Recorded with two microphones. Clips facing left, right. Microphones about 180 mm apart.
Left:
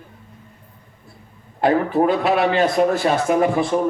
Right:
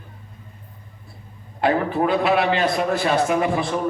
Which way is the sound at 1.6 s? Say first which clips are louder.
Left 3 dB; 40° left (ahead or behind).